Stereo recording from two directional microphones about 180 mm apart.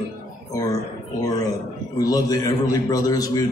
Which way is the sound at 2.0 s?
20° left (ahead or behind).